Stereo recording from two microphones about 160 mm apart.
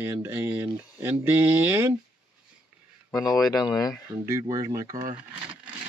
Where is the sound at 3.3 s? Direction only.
20° left (ahead or behind).